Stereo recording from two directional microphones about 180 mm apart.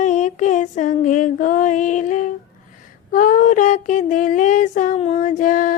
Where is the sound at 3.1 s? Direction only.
45° left (ahead or behind).